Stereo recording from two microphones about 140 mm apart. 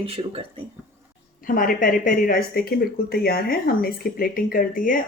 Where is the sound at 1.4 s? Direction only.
85° left.